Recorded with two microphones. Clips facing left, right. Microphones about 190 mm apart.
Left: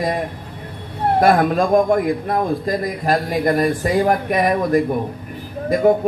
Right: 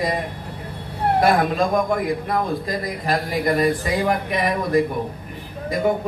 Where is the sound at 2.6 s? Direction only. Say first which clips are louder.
Left 4 dB; 50° left (ahead or behind).